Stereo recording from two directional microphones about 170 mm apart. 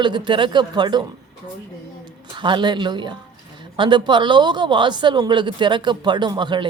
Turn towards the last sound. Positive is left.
turn(degrees=-25)  # may be behind; listen again after turning